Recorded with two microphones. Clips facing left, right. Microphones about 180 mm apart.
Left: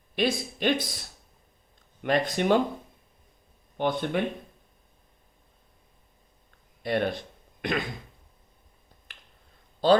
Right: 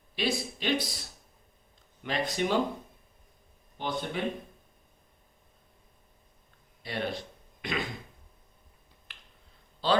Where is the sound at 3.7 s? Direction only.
60° left (ahead or behind).